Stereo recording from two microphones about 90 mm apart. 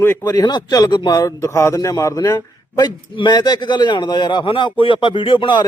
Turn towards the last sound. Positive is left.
turn(degrees=60)  # may be behind; listen again after turning